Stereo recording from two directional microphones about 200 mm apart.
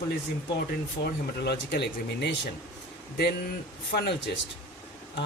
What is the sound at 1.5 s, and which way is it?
Speech, 55° left (ahead or behind).